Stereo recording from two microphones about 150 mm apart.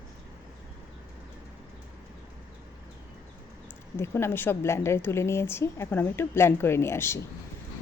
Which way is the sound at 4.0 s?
15° left (ahead or behind).